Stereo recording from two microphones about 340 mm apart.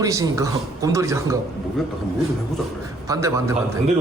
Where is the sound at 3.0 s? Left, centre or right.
Centre.